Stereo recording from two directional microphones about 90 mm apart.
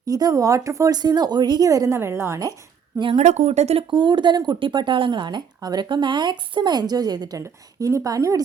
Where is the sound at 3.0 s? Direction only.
75° right (ahead or behind).